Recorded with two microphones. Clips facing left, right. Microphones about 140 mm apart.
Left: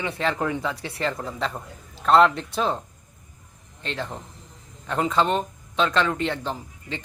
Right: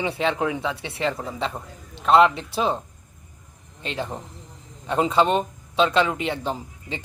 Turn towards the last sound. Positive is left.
turn(degrees=-15)  # may be behind; listen again after turning